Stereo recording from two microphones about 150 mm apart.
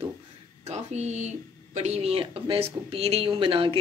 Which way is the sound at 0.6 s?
50° right (ahead or behind).